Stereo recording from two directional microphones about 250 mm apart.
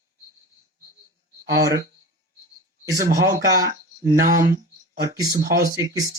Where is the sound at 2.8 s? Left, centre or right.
Centre.